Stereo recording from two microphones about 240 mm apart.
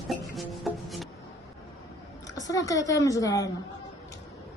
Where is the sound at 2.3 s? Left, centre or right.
Centre.